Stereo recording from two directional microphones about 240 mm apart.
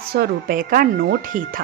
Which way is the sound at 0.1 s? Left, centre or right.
Right.